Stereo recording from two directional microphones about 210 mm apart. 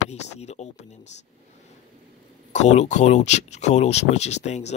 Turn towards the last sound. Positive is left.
turn(degrees=35)  # may be behind; listen again after turning